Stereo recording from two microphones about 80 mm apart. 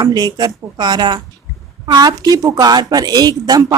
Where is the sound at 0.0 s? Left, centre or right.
Right.